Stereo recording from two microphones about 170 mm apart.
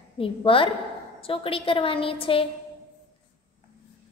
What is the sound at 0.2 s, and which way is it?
A woman's voice, 30° left (ahead or behind).